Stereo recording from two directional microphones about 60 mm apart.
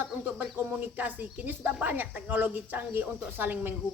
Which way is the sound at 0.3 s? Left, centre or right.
Right.